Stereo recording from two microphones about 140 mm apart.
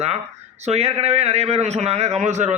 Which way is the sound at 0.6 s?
50° right (ahead or behind).